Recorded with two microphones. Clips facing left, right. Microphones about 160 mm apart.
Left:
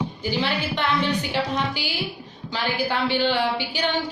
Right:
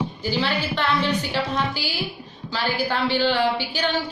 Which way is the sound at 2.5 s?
15° left (ahead or behind).